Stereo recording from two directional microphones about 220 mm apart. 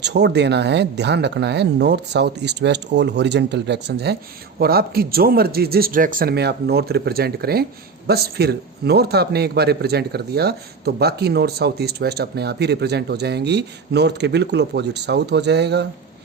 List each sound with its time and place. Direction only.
0.0 s speech: 50° right (ahead or behind)